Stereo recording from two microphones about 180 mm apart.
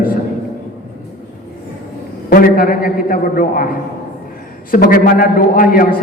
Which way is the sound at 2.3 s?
55° left (ahead or behind).